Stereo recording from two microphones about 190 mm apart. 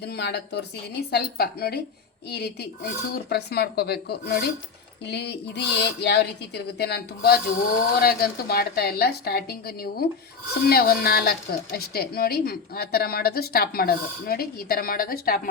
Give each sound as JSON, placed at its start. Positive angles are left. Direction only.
{"t": 0.0, "sound": "a woman's voice", "side_deg": 60}